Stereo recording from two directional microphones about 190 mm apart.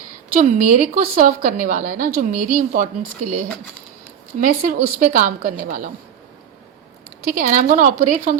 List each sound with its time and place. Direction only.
0.3 s a woman's voice: 40° right (ahead or behind)
7.2 s a woman's voice: 45° right (ahead or behind)